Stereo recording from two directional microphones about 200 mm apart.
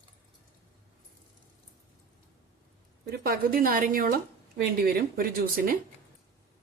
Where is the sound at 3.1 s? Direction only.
50° right (ahead or behind).